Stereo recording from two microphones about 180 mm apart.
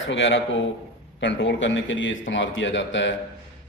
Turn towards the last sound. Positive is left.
turn(degrees=90)